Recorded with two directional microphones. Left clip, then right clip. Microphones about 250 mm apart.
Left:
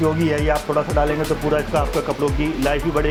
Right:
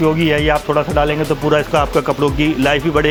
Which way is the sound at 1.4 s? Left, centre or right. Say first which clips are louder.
Right 7 dB; right.